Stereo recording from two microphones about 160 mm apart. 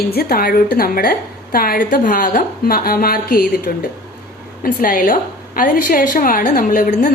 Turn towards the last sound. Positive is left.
turn(degrees=55)  # may be behind; listen again after turning